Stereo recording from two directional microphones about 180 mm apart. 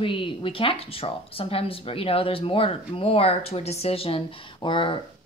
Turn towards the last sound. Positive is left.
turn(degrees=30)  # may be behind; listen again after turning